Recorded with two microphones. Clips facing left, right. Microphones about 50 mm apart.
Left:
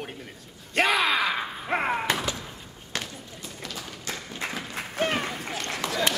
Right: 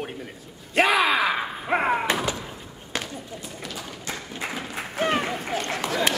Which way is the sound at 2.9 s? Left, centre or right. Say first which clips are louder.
Right 3 dB; centre.